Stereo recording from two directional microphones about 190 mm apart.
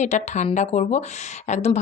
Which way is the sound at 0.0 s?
40° left (ahead or behind).